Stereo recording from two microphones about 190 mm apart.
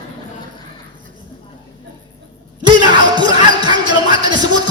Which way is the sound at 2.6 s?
25° right (ahead or behind).